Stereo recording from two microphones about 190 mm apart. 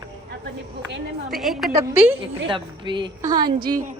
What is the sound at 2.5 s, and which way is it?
A woman's voice, 25° right (ahead or behind).